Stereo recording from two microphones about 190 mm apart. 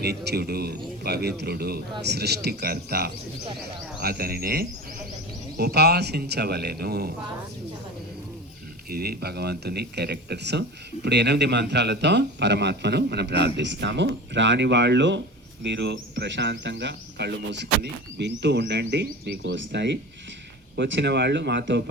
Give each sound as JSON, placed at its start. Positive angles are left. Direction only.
{"t": 0.0, "sound": "speech", "side_deg": -55}
{"t": 8.9, "sound": "speech", "side_deg": -55}